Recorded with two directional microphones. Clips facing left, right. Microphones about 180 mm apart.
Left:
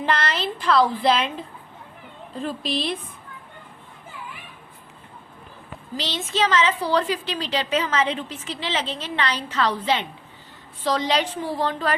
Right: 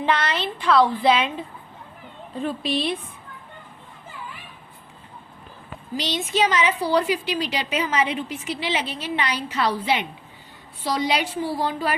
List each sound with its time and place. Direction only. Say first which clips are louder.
0.0 s a woman's voice: right 1 dB; centre (ahead or behind)
6.0 s a woman's voice: right 2 dB; 15° right (ahead or behind)